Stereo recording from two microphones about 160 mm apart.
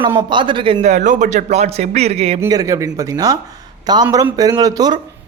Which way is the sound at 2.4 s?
20° right (ahead or behind).